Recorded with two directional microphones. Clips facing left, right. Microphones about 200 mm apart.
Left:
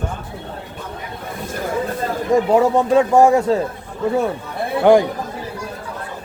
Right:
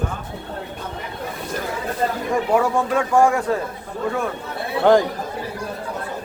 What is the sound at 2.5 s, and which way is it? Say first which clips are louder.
Speech: left 3 dB; 25° left (ahead or behind).